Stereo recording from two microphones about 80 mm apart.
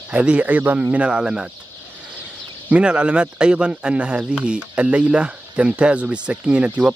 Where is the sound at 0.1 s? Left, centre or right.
Centre.